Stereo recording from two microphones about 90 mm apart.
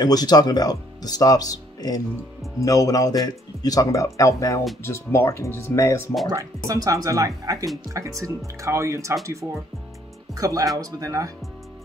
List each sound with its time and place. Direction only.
0.0 s a man's voice: 45° left (ahead or behind); by 6.0 s 30° left (ahead or behind)
6.2 s speech: 40° right (ahead or behind)